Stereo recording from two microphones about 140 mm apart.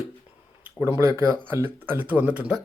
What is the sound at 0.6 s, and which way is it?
Speech, 15° right (ahead or behind).